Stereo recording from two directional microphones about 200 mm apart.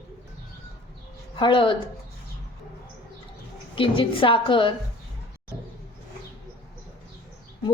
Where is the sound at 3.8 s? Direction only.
25° left (ahead or behind).